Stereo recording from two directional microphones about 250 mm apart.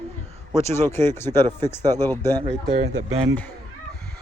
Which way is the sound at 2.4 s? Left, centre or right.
Right.